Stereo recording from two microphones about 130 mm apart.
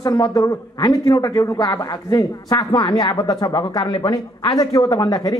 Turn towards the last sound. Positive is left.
turn(degrees=30)  # may be behind; listen again after turning